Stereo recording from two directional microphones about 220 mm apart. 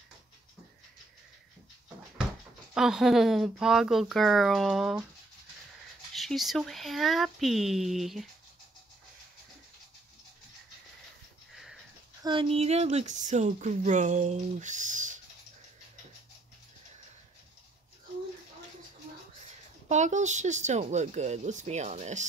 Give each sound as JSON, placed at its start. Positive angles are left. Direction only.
{"t": 2.7, "sound": "speech", "side_deg": 0}
{"t": 6.1, "sound": "speech", "side_deg": 0}
{"t": 11.5, "sound": "sniff", "side_deg": 0}
{"t": 12.2, "sound": "speech", "side_deg": -20}
{"t": 19.9, "sound": "speech", "side_deg": -35}